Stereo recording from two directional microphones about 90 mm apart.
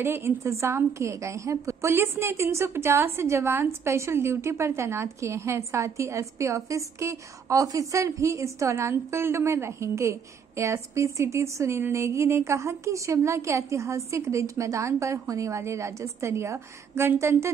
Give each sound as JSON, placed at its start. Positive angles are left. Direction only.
{"t": 0.0, "sound": "a woman's voice", "side_deg": -30}